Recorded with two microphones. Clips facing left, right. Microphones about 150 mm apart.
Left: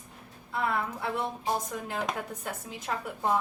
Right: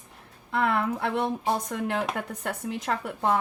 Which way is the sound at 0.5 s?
70° right (ahead or behind).